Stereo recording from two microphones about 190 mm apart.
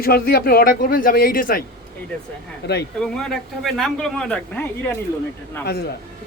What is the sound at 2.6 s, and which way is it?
Speech, 60° left (ahead or behind).